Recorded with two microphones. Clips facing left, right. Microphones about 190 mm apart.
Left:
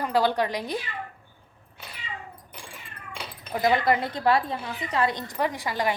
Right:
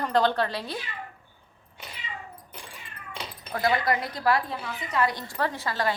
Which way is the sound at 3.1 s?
15° left (ahead or behind).